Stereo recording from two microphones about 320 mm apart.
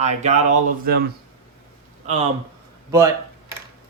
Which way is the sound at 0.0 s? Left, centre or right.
Right.